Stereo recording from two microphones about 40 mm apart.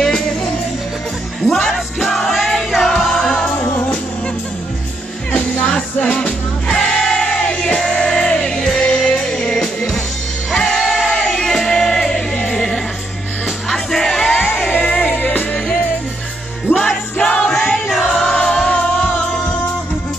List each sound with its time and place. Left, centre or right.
0.0 s music: centre
5.3 s music: left
14.7 s music: left
16.8 s music: centre
17.7 s choir: centre
18.1 s music: centre
18.7 s music: left